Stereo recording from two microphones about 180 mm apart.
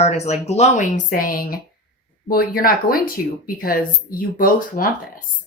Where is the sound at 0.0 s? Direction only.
35° left (ahead or behind).